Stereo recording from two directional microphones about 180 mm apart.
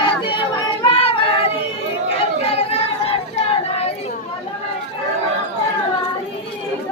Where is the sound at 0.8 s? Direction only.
30° left (ahead or behind).